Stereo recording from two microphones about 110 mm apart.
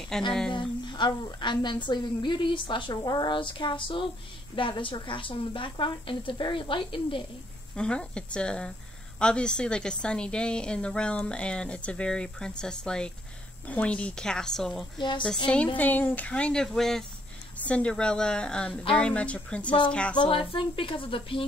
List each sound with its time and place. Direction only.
0.1 s speech: 5° left (ahead or behind)
0.5 s a woman's voice: 45° left (ahead or behind)
7.7 s a woman's voice: 10° left (ahead or behind)
15.0 s a woman's voice: 45° left (ahead or behind)
15.4 s a woman's voice: 10° left (ahead or behind)
20.2 s a woman's voice: 50° left (ahead or behind)